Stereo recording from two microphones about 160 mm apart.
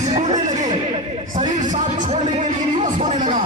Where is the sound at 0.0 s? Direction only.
45° right (ahead or behind).